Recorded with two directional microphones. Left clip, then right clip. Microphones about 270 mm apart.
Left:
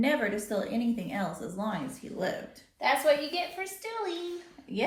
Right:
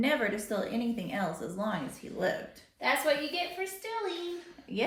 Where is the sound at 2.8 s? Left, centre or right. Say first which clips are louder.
Left 3 dB; centre.